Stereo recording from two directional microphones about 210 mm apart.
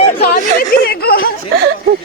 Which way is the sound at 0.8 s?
45° left (ahead or behind).